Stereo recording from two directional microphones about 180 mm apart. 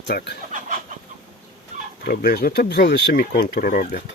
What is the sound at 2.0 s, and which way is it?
Speech, 60° left (ahead or behind).